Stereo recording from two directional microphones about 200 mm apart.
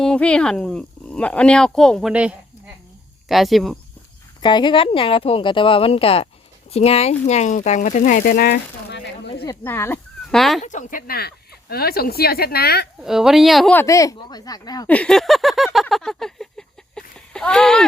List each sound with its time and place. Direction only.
0.0 s speech: 5° left (ahead or behind)
4.4 s a woman's voice: 20° left (ahead or behind); by 9.0 s 50° left (ahead or behind)
9.5 s speech: 10° left (ahead or behind)
10.6 s speech: 40° left (ahead or behind)
13.0 s speech: centre (ahead or behind)
13.8 s a woman's voice: 15° left (ahead or behind)
14.8 s a sound: 5° left (ahead or behind)